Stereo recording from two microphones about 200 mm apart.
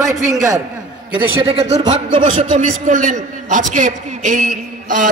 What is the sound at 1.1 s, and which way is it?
A man's voice, 30° right (ahead or behind).